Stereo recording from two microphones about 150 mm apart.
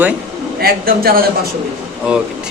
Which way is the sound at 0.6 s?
85° right.